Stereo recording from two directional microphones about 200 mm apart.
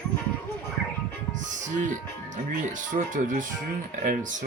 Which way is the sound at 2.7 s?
40° right (ahead or behind).